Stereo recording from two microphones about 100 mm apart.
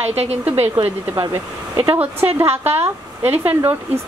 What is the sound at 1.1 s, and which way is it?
A woman's voice, 30° right (ahead or behind).